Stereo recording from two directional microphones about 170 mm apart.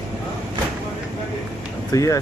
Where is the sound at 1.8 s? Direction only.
20° left (ahead or behind).